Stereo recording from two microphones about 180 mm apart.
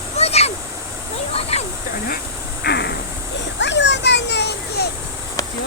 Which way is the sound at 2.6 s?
65° left (ahead or behind).